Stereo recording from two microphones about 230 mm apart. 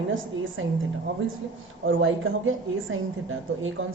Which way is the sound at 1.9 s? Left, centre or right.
Right.